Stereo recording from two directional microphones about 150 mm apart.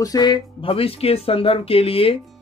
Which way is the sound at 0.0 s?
25° left (ahead or behind).